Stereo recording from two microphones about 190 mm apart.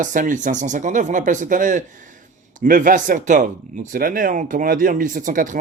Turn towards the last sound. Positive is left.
turn(degrees=-45)  # may be behind; listen again after turning